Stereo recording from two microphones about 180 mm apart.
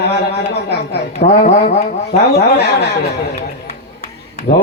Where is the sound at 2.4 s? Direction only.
65° left (ahead or behind).